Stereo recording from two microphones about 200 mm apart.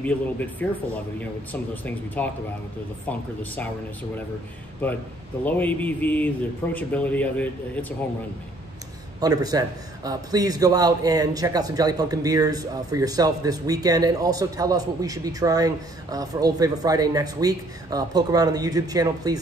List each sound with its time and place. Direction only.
0.0 s a man's voice: 10° left (ahead or behind)
5.4 s a man's voice: 10° left (ahead or behind)
9.2 s a man's voice: 20° right (ahead or behind)